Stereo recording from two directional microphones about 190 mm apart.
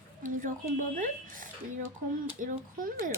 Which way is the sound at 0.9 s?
45° right (ahead or behind).